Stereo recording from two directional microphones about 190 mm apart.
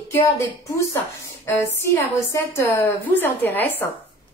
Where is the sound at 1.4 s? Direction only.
10° left (ahead or behind).